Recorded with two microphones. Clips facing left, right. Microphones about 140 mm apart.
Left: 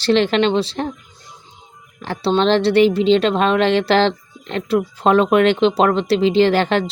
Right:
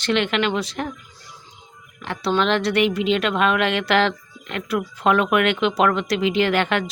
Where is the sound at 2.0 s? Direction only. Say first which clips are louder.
Left 4 dB; 30° left (ahead or behind).